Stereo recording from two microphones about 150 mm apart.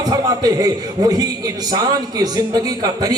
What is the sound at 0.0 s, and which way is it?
A man's voice, 25° right (ahead or behind).